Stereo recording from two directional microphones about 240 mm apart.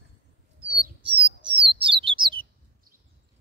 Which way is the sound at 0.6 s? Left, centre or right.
Right.